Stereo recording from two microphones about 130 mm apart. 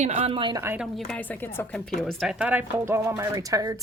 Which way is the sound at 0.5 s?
20° right (ahead or behind).